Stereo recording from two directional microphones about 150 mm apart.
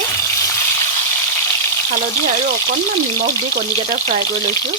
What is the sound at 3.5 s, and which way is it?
Speech, 90° right.